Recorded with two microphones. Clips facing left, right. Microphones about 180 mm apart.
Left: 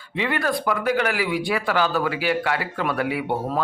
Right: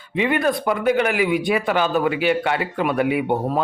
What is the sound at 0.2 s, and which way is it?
Speech, 20° right (ahead or behind).